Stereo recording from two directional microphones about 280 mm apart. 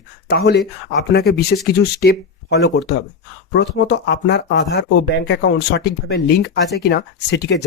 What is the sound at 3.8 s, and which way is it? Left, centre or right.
Speech, left.